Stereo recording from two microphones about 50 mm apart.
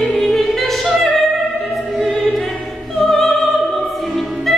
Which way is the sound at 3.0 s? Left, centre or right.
Centre.